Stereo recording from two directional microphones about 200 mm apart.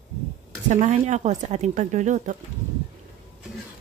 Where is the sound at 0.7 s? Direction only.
35° right (ahead or behind).